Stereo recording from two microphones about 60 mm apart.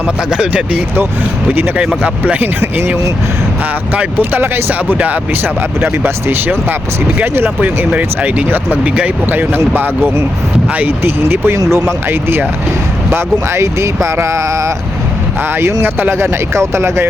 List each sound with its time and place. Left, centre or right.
0.3 s speech: centre
2.2 s speech: right
2.6 s speech: right
4.2 s speech: right
7.9 s speech: right
9.3 s speech: right
15.8 s speech: right
16.1 s speech: right